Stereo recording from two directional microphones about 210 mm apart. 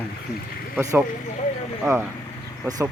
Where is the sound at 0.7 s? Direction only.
10° right (ahead or behind).